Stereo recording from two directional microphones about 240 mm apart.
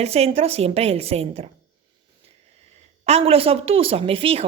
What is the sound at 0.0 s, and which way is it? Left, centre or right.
A woman's voice, right.